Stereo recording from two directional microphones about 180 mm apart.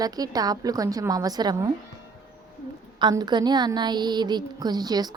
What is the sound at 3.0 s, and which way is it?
A woman's voice, 25° right (ahead or behind).